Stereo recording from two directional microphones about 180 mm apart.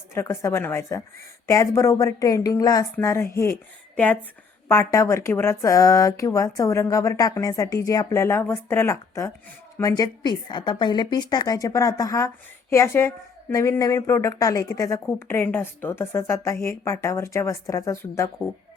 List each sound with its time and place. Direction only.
0.1 s a woman's voice: 15° left (ahead or behind)